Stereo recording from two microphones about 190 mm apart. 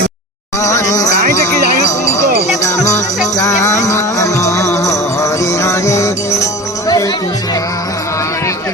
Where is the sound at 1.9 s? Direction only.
15° left (ahead or behind).